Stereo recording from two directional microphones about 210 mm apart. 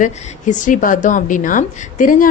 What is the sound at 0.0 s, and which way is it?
A woman's voice, 35° left (ahead or behind).